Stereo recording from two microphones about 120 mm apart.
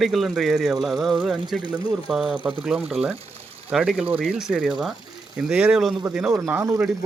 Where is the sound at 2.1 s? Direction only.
5° right (ahead or behind).